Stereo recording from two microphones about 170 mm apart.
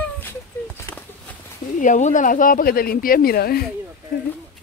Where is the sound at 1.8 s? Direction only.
45° left (ahead or behind); by 3.6 s 65° left (ahead or behind).